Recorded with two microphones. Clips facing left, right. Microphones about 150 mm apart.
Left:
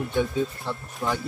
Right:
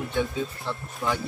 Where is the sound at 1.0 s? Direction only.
5° left (ahead or behind).